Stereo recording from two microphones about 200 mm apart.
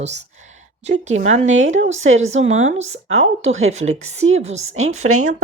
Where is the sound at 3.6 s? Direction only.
35° right (ahead or behind).